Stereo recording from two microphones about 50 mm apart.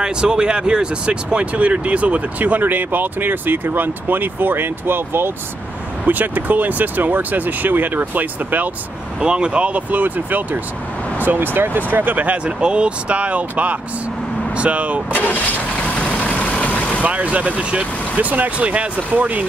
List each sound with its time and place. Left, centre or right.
0.0 s speech: centre; by 5.3 s right
6.0 s speech: right
9.2 s speech: centre
12.5 s speech: centre
15.1 s vehicle: left
17.0 s speech: right